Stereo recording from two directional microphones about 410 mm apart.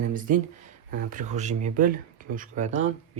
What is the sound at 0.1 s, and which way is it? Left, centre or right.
Speech, centre.